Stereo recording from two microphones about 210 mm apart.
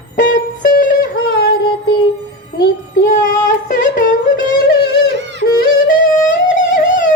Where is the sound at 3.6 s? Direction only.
35° left (ahead or behind).